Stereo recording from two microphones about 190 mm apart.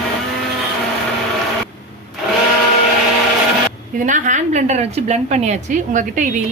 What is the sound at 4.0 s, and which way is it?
A woman's voice, 40° right (ahead or behind).